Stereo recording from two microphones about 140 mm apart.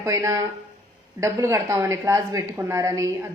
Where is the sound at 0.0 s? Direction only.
20° right (ahead or behind).